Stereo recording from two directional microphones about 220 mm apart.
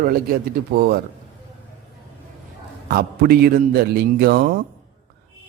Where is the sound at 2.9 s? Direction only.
45° right (ahead or behind).